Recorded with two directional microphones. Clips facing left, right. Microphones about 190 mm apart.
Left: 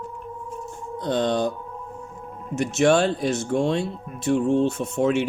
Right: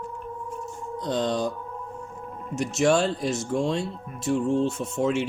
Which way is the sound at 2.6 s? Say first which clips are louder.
Left 3 dB; 60° left (ahead or behind).